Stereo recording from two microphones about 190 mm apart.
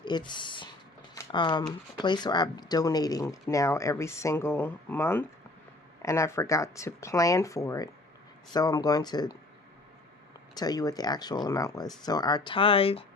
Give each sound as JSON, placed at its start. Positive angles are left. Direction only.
{"t": 0.0, "sound": "speech", "side_deg": 25}
{"t": 1.1, "sound": "a sound", "side_deg": 20}
{"t": 2.0, "sound": "speech", "side_deg": 25}
{"t": 10.5, "sound": "speech", "side_deg": 20}